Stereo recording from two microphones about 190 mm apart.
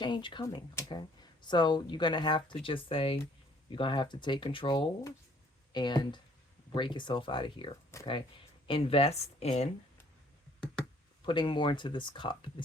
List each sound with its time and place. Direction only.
0.0 s speech: 25° left (ahead or behind)
7.9 s speech: 15° left (ahead or behind)
8.6 s speech: 30° left (ahead or behind)
11.3 s speech: 25° left (ahead or behind)